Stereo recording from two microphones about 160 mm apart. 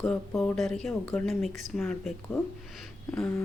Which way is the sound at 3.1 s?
10° left (ahead or behind).